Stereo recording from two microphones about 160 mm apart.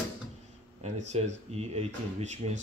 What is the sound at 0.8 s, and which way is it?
Speech, 45° right (ahead or behind).